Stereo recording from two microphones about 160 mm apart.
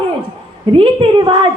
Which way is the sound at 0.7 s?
35° right (ahead or behind).